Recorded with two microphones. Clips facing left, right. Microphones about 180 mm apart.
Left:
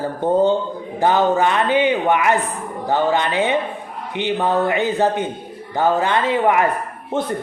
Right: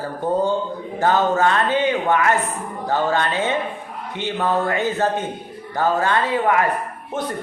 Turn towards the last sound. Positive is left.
turn(degrees=30)  # may be behind; listen again after turning